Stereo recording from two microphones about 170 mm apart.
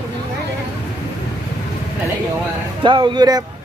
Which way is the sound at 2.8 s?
30° right (ahead or behind).